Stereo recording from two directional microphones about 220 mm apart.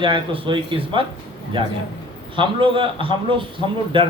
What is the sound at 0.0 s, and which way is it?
Speech, 20° right (ahead or behind).